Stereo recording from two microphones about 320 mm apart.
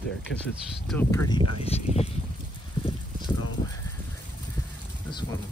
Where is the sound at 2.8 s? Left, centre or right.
Centre.